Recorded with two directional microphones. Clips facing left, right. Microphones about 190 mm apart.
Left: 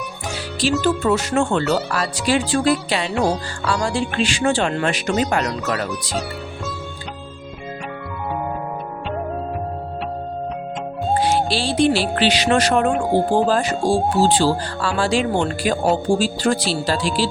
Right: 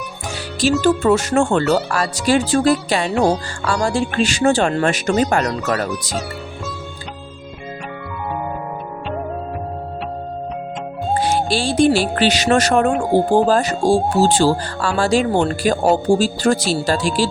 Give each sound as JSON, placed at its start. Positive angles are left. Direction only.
{"t": 0.8, "sound": "speech", "side_deg": -45}
{"t": 3.1, "sound": "speech", "side_deg": 0}
{"t": 3.7, "sound": "speech", "side_deg": -45}
{"t": 5.4, "sound": "speech", "side_deg": 0}
{"t": 11.2, "sound": "speech", "side_deg": -45}